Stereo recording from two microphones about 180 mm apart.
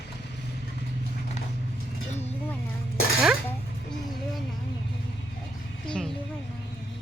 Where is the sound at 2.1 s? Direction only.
35° left (ahead or behind).